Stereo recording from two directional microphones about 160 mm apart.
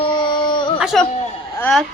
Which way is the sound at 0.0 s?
30° left (ahead or behind).